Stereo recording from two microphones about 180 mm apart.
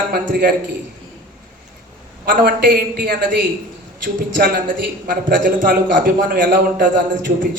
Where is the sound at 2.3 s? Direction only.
50° right (ahead or behind).